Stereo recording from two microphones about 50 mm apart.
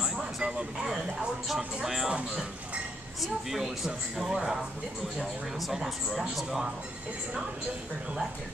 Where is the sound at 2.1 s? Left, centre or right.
Centre.